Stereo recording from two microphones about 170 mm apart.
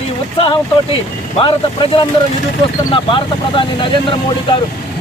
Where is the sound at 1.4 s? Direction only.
30° left (ahead or behind).